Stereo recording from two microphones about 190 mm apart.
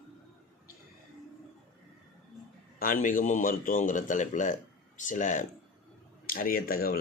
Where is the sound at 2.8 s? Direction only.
45° left (ahead or behind).